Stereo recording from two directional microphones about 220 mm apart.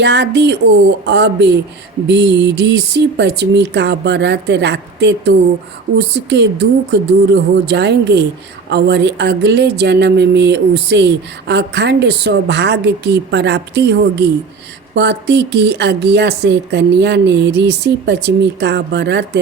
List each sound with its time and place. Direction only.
0.0 s speech: 50° right (ahead or behind)